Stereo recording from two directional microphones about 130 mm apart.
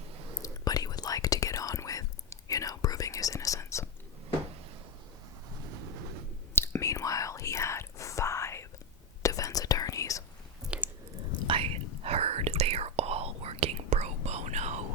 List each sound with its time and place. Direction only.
0.4 s whispering: 30° left (ahead or behind)
6.5 s whispering: 20° left (ahead or behind)
10.6 s chewing: 10° right (ahead or behind)
11.4 s whispering: 45° right (ahead or behind); by 14.8 s 60° right (ahead or behind)